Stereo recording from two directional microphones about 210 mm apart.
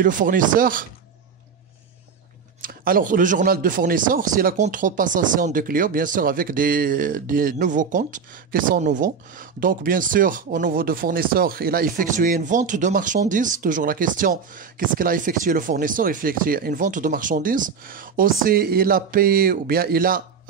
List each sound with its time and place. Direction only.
0.0 s speech: 40° right (ahead or behind)
2.6 s speech: 40° right (ahead or behind)